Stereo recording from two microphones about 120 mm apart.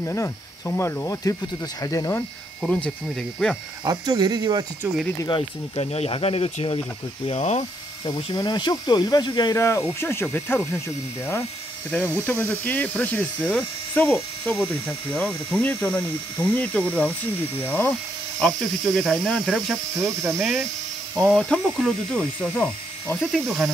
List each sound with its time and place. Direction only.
0.0 s speech: 25° left (ahead or behind)
2.6 s speech: 5° left (ahead or behind)
3.8 s speech: 35° right (ahead or behind)
5.3 s speech: 55° left (ahead or behind)
8.3 s speech: 35° left (ahead or behind)
9.6 s speech: 25° left (ahead or behind)
12.3 s speech: 15° left (ahead or behind)
18.4 s speech: 5° left (ahead or behind)